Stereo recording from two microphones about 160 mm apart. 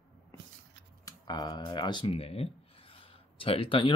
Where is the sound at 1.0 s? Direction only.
25° left (ahead or behind).